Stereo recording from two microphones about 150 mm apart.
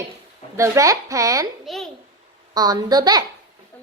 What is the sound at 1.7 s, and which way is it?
Speech, centre (ahead or behind).